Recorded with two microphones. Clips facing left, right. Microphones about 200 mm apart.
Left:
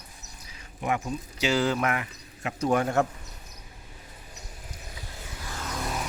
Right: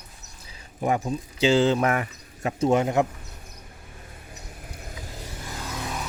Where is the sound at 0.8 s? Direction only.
35° right (ahead or behind).